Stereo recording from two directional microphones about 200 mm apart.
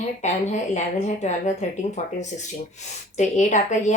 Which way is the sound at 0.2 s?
35° left (ahead or behind).